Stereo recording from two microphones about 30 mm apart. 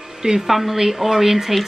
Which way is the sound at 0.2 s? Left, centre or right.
Right.